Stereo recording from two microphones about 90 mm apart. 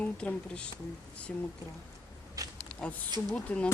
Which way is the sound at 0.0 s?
15° left (ahead or behind).